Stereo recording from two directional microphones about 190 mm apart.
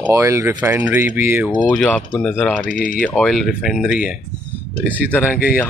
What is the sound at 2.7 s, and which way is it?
Speech, 50° left (ahead or behind).